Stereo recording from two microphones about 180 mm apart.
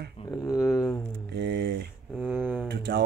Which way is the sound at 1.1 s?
70° right (ahead or behind).